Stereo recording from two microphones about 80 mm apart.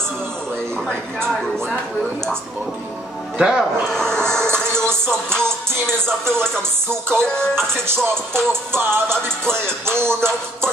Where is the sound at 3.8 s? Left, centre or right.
Centre.